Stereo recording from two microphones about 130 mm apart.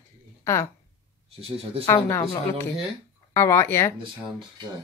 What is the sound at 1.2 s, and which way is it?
Speech, 50° right (ahead or behind).